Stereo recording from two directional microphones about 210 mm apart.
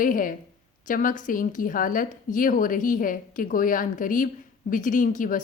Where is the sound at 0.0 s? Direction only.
40° left (ahead or behind).